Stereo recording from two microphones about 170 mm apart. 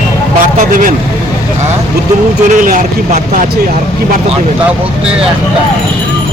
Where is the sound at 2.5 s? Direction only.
50° right (ahead or behind).